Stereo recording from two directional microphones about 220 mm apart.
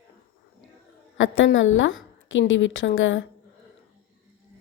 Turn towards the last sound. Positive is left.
turn(degrees=60)  # may be behind; listen again after turning